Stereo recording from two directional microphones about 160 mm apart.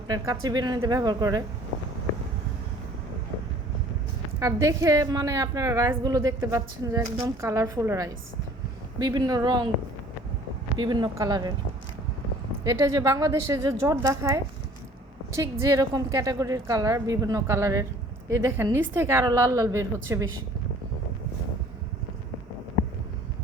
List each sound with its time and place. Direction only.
0.1 s a woman's voice: 25° right (ahead or behind)
4.4 s a woman's voice: 20° right (ahead or behind)
10.8 s a woman's voice: 30° right (ahead or behind)
12.6 s a woman's voice: 25° right (ahead or behind)